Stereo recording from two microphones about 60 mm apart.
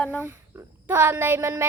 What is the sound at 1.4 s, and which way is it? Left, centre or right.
Child singing, right.